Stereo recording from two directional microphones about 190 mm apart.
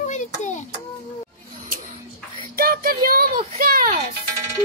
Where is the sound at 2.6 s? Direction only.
50° right (ahead or behind).